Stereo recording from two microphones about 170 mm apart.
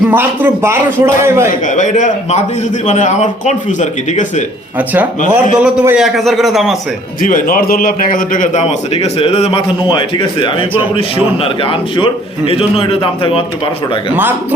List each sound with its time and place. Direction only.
0.1 s a man's voice: 10° right (ahead or behind)
1.6 s a man's voice: 45° left (ahead or behind)
5.3 s a man's voice: 10° right (ahead or behind)
7.2 s a man's voice: 55° left (ahead or behind); by 13.4 s 35° left (ahead or behind)